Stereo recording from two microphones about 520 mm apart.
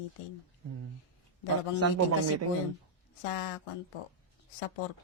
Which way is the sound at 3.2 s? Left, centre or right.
Left.